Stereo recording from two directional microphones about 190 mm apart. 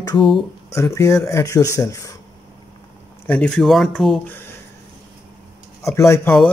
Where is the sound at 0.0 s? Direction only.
20° left (ahead or behind).